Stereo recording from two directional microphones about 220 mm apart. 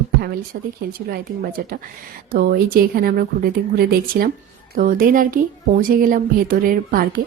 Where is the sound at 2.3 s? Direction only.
45° right (ahead or behind).